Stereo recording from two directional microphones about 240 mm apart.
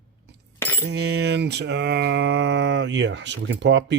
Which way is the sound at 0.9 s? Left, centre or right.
Right.